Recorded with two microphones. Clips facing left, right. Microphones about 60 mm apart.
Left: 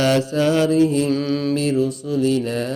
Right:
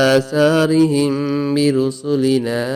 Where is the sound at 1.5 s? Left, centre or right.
Right.